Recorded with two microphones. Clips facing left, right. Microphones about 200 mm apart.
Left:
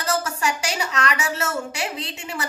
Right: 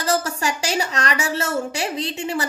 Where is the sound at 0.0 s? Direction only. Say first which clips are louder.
Right 2 dB; 30° right (ahead or behind).